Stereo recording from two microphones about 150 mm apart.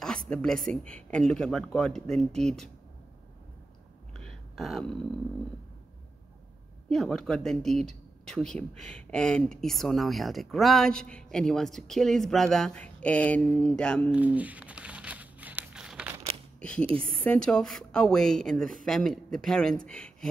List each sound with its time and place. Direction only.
0.3 s speech: 5° left (ahead or behind)
2.3 s speech: 45° right (ahead or behind)
4.1 s a sound: 5° left (ahead or behind)
6.9 s speech: 5° left (ahead or behind)
14.1 s crumpling: 10° right (ahead or behind)
16.5 s a sound: 5° left (ahead or behind)
17.0 s speech: 5° left (ahead or behind)